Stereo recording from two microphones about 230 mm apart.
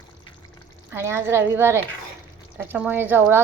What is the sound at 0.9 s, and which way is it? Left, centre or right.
A woman's voice, centre.